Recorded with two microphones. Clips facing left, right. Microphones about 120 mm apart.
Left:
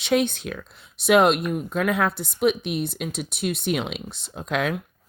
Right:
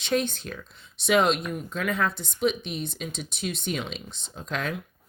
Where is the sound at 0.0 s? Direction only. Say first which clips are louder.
Left 5 dB; 70° left (ahead or behind).